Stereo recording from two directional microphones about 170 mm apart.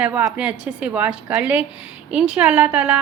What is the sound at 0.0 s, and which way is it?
A woman's voice, 5° right (ahead or behind).